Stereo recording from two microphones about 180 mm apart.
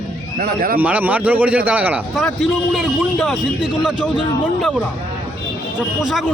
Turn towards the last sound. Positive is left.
turn(degrees=-5)  # may be behind; listen again after turning